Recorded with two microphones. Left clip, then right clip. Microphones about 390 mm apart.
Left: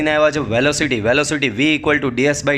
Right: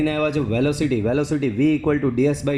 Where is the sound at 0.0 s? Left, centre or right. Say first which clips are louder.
Left 6 dB; centre.